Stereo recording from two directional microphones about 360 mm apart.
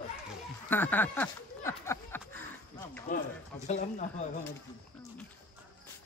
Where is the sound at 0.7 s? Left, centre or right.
Centre.